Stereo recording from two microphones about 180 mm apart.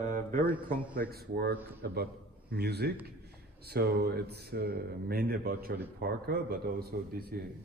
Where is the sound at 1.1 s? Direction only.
60° right (ahead or behind).